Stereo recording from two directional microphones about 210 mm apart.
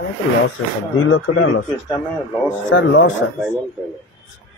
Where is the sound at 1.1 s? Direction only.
70° left (ahead or behind).